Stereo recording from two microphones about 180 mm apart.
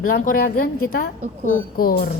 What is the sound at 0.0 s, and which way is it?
Speech, 50° left (ahead or behind).